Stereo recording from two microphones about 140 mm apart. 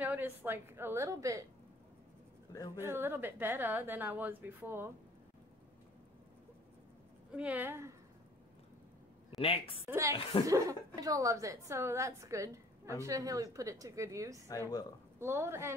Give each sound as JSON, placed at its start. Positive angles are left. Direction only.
{"t": 0.0, "sound": "a woman's voice", "side_deg": -10}
{"t": 2.5, "sound": "a woman's voice", "side_deg": 25}
{"t": 2.8, "sound": "a woman's voice", "side_deg": -15}
{"t": 7.3, "sound": "a woman's voice", "side_deg": -10}
{"t": 9.4, "sound": "a woman's voice", "side_deg": 45}
{"t": 9.8, "sound": "a woman's voice", "side_deg": -20}